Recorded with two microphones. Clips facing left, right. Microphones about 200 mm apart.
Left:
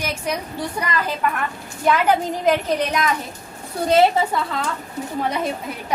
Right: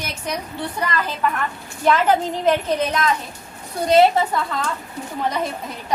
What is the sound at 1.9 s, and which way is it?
Speech, 10° left (ahead or behind).